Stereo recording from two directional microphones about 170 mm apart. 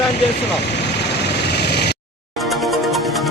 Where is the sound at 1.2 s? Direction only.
75° left (ahead or behind).